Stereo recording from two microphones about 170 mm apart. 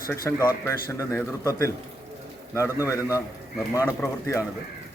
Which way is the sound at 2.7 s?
15° right (ahead or behind).